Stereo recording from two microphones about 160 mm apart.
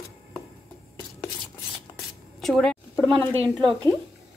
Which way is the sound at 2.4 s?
5° left (ahead or behind).